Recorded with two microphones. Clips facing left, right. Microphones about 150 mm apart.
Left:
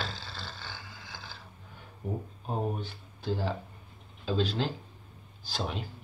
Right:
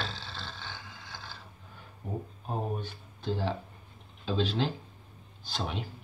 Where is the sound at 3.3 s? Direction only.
5° left (ahead or behind).